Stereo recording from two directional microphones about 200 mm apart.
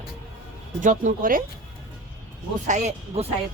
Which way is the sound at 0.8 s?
40° right (ahead or behind).